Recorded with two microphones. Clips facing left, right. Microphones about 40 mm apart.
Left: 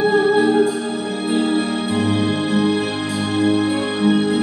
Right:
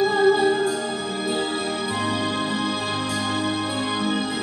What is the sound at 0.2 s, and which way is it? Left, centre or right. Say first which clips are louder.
Music: left 3 dB; left.